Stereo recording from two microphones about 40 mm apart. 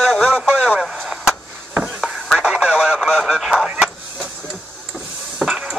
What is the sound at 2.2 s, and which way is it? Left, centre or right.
Radio, centre.